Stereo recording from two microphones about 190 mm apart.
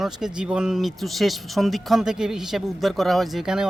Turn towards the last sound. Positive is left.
turn(degrees=-5)  # may be behind; listen again after turning